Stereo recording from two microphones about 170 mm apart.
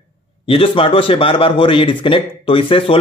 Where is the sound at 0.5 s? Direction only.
30° left (ahead or behind).